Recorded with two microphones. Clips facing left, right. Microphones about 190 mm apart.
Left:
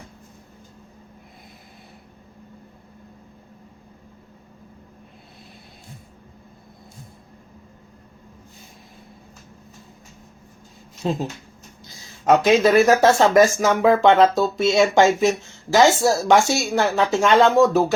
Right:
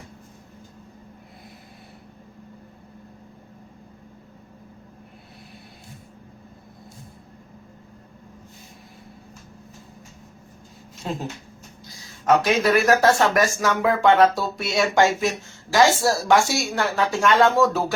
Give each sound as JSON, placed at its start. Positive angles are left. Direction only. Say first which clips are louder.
{"t": 11.9, "sound": "speech", "louder": "left 2 dB", "side_deg": 25}